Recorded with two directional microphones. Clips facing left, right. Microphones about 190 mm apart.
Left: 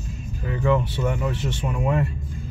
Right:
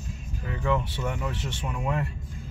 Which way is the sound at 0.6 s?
10° left (ahead or behind).